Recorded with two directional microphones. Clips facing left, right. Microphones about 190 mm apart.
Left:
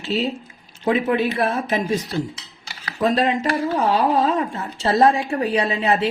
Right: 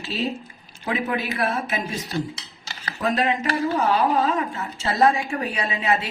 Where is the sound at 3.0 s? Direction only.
30° left (ahead or behind).